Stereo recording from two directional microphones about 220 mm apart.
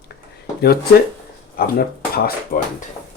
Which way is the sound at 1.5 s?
45° left (ahead or behind).